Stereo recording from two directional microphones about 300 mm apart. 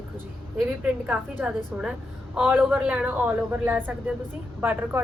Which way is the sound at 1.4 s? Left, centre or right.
Centre.